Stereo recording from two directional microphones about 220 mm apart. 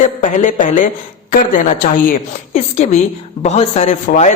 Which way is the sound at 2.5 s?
30° left (ahead or behind).